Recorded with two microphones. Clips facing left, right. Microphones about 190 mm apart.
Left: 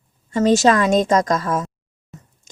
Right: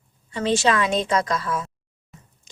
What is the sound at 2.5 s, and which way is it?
Chewing, 45° left (ahead or behind).